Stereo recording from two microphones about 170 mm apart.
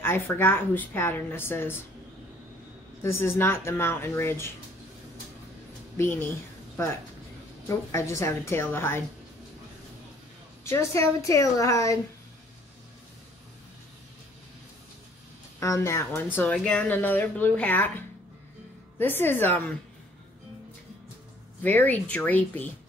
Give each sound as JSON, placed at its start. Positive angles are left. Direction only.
{"t": 0.0, "sound": "speech", "side_deg": 15}
{"t": 3.0, "sound": "speech", "side_deg": 15}
{"t": 5.9, "sound": "speech", "side_deg": 15}
{"t": 7.6, "sound": "speech", "side_deg": 15}
{"t": 10.6, "sound": "speech", "side_deg": 15}
{"t": 15.6, "sound": "speech", "side_deg": 15}
{"t": 21.6, "sound": "speech", "side_deg": 10}